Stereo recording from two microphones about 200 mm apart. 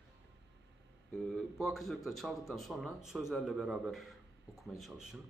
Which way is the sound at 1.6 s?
Centre (ahead or behind).